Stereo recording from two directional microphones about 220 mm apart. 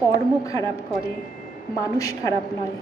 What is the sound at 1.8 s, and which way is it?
Speech, 15° left (ahead or behind).